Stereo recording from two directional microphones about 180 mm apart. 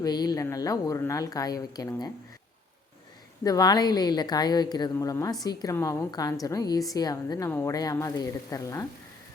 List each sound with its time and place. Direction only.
0.0 s a woman's voice: 20° left (ahead or behind)
3.4 s a woman's voice: 20° left (ahead or behind)